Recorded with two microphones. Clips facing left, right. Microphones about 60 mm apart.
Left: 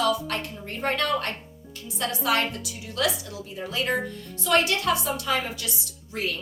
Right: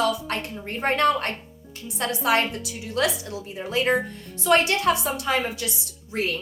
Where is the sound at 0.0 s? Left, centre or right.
Right.